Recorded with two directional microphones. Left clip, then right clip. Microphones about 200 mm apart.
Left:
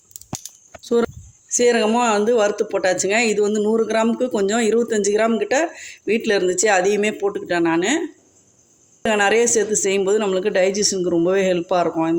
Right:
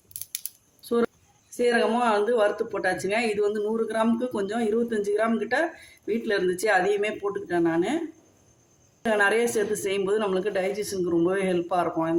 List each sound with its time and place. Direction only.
0.8 s a sound: 40° left (ahead or behind)
1.5 s speech: 40° left (ahead or behind)
9.0 s speech: 35° left (ahead or behind)